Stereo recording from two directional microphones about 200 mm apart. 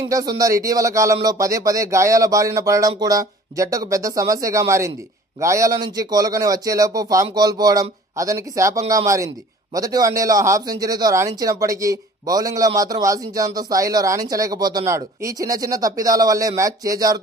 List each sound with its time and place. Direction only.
0.1 s speech: 15° right (ahead or behind)